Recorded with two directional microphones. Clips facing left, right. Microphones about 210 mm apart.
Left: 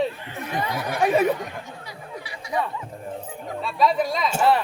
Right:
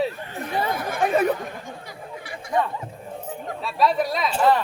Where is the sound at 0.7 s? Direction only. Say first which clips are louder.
Even; 50° right (ahead or behind).